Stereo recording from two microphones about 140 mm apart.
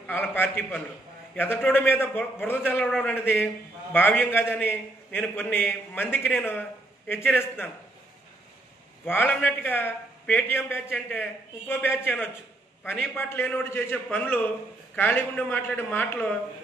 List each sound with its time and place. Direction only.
0.0 s a man's voice: 15° left (ahead or behind)
9.0 s a man's voice: 15° left (ahead or behind)